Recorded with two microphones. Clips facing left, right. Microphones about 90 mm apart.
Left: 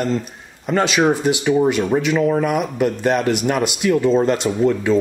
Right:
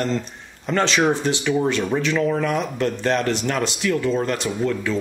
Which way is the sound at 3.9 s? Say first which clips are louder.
Left 8 dB; 25° left (ahead or behind).